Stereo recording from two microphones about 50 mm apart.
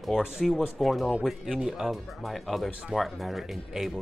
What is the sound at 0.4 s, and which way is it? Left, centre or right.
Speech, centre.